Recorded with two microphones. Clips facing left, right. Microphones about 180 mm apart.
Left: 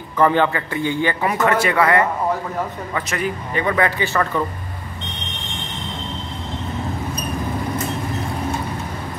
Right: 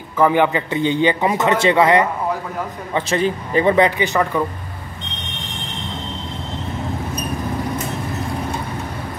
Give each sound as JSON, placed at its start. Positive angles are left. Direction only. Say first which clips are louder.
{"t": 0.2, "sound": "speech", "louder": "right 1 dB", "side_deg": -15}